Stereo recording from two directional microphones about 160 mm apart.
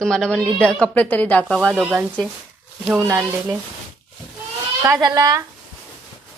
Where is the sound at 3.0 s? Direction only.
20° right (ahead or behind).